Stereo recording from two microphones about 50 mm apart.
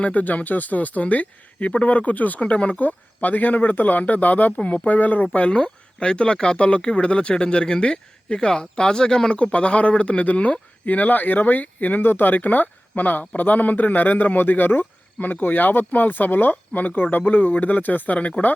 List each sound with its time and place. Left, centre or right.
0.0 s speech: left